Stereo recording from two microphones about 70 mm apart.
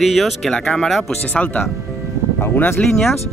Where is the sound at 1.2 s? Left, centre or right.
Left.